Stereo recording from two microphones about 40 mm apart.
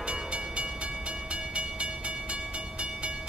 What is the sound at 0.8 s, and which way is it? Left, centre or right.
Train, right.